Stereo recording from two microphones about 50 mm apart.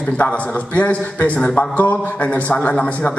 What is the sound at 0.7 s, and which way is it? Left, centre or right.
A man's voice, left.